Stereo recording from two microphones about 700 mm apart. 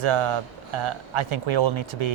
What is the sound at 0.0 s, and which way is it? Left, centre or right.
Speech, right.